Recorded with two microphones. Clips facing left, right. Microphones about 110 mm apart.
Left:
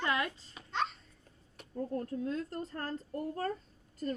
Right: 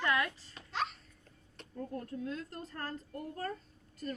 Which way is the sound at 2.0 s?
35° left (ahead or behind).